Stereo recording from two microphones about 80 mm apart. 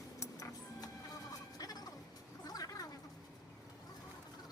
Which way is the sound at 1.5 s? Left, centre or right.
Left.